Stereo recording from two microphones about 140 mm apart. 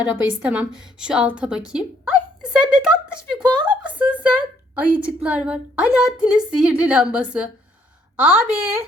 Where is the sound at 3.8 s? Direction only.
10° right (ahead or behind).